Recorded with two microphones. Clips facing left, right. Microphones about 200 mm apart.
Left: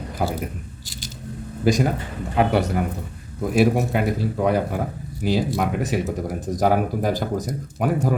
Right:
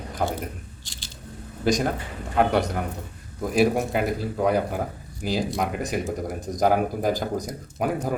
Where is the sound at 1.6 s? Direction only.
5° left (ahead or behind).